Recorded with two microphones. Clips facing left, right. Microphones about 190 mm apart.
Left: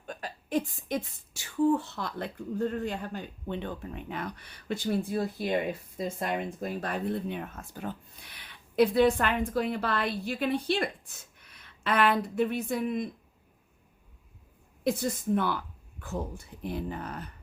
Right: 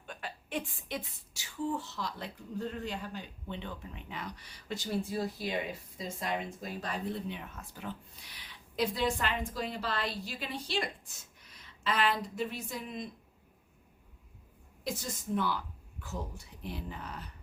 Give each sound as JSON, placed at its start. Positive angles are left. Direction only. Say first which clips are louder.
{"t": 0.0, "sound": "speech", "louder": "left 4 dB", "side_deg": 40}
{"t": 14.8, "sound": "speech", "louder": "left 9 dB", "side_deg": 60}